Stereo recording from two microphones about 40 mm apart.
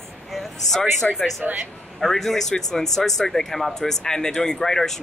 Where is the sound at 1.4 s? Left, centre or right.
Right.